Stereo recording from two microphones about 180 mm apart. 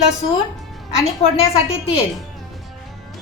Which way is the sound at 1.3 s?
30° left (ahead or behind).